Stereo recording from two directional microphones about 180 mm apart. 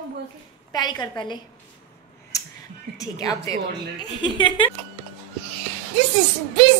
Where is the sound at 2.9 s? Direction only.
70° right (ahead or behind).